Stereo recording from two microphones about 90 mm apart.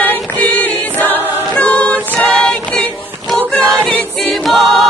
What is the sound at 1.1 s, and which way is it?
Choir, 15° left (ahead or behind).